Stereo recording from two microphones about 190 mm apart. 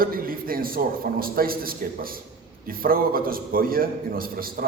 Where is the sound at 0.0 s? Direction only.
50° right (ahead or behind).